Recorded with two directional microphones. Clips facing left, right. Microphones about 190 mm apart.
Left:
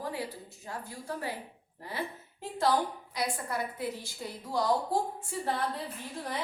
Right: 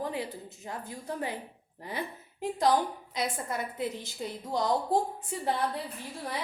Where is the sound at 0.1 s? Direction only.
20° right (ahead or behind).